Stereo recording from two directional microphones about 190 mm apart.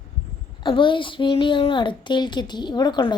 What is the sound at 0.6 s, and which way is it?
A child's voice, 25° left (ahead or behind).